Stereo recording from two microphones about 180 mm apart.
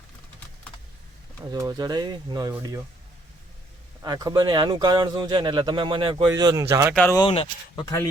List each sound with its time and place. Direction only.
1.6 s speech: 20° right (ahead or behind)
4.0 s speech: 20° right (ahead or behind)
6.9 s speech: 10° left (ahead or behind)
7.2 s speech: 30° left (ahead or behind)
7.9 s speech: 15° left (ahead or behind)